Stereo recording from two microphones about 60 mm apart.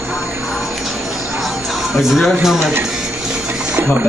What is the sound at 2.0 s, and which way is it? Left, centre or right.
Speech, centre.